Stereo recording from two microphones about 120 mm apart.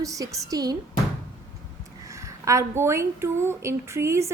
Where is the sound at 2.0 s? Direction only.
25° right (ahead or behind).